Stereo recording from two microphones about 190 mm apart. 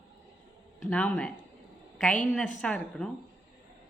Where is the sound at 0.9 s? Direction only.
5° left (ahead or behind).